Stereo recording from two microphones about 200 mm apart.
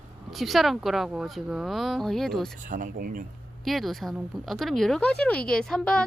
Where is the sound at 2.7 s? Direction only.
40° right (ahead or behind).